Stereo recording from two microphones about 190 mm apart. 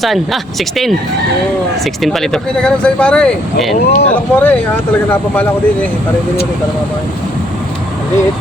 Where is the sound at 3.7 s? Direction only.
40° left (ahead or behind).